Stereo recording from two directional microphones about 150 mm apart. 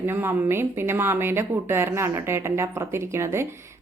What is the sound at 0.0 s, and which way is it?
A woman's voice, 15° right (ahead or behind).